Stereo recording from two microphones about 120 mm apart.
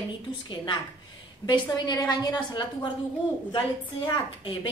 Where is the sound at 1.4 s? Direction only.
35° left (ahead or behind).